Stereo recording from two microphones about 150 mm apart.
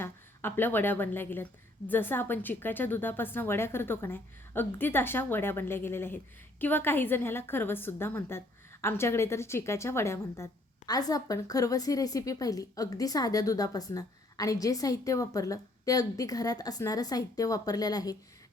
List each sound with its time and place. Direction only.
0.0 s a woman's voice: 15° left (ahead or behind)